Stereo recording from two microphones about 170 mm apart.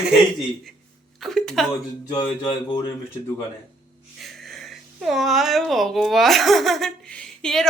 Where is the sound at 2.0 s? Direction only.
25° left (ahead or behind).